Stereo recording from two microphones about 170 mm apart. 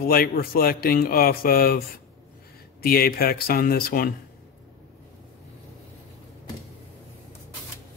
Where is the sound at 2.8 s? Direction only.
60° left (ahead or behind).